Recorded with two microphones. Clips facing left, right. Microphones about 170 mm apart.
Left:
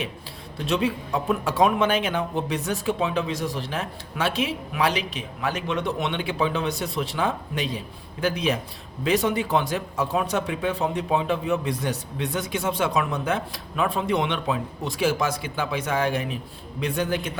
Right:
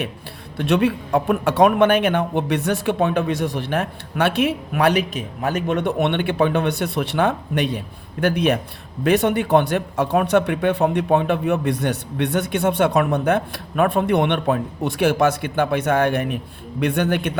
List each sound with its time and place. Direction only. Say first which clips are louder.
0.5 s speech: right 6 dB; 65° right (ahead or behind)